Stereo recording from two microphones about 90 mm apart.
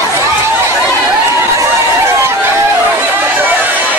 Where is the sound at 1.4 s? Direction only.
30° right (ahead or behind).